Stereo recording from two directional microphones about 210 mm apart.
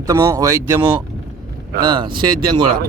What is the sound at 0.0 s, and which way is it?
Speech, 15° right (ahead or behind).